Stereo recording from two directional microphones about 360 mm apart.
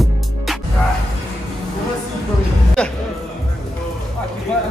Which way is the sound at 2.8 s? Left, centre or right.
Centre.